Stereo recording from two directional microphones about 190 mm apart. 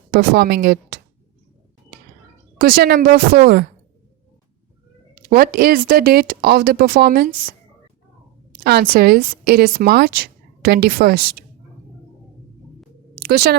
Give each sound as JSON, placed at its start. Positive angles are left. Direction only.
{"t": 0.1, "sound": "speech", "side_deg": -55}
{"t": 2.6, "sound": "a woman's voice", "side_deg": -50}
{"t": 5.3, "sound": "a woman's voice", "side_deg": -50}
{"t": 8.6, "sound": "a woman's voice", "side_deg": -55}
{"t": 13.1, "sound": "a sound", "side_deg": -55}